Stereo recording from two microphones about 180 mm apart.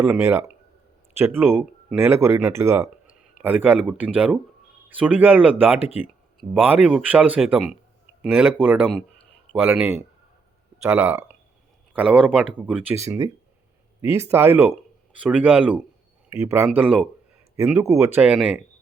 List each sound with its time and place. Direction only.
0.0 s speech: 10° right (ahead or behind)